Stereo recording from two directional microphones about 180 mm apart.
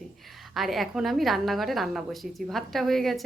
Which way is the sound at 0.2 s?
Centre (ahead or behind).